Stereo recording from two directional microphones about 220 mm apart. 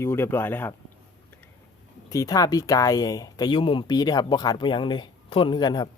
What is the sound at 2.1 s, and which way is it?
Speech, 15° left (ahead or behind).